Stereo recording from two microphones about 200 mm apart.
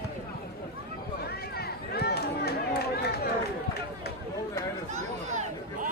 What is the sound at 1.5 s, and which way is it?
Run, 50° left (ahead or behind).